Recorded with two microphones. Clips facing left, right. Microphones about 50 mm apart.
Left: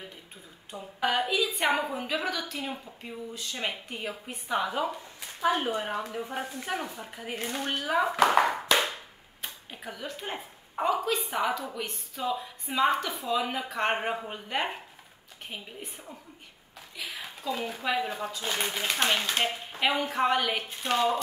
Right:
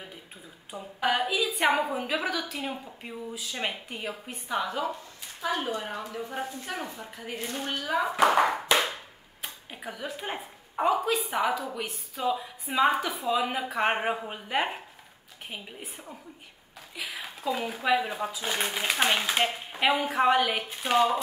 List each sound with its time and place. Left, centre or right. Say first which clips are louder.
0.7 s a woman's voice: right 1 dB; centre
5.4 s a woman's voice: left 3 dB; left
8.0 s a woman's voice: right 1 dB; centre
16.9 s speech: right 2 dB; centre